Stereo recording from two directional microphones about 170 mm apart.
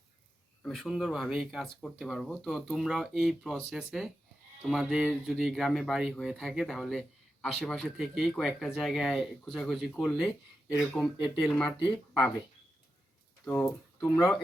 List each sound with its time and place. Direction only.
0.6 s speech: centre (ahead or behind)
11.8 s speech: 25° left (ahead or behind)
13.4 s speech: 5° left (ahead or behind)